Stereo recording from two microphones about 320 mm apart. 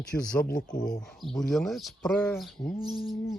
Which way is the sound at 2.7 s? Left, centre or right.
Left.